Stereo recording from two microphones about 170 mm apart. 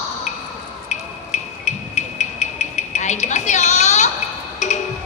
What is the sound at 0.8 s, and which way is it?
Music, 40° left (ahead or behind).